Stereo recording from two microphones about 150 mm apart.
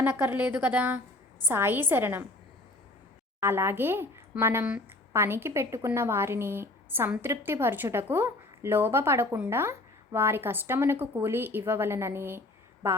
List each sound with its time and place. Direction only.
0.0 s speech: 10° right (ahead or behind)
3.4 s speech: 15° right (ahead or behind)